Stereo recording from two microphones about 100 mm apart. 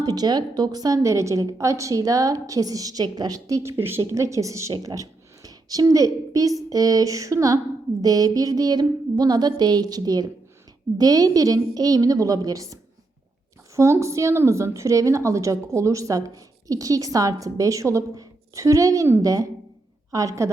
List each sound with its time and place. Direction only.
0.0 s a woman's voice: 45° right (ahead or behind)